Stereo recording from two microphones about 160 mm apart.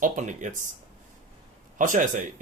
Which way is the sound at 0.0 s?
50° right (ahead or behind).